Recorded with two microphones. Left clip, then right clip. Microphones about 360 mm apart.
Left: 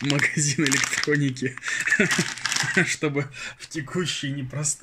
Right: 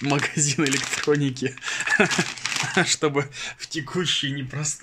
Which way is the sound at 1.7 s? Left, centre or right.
Right.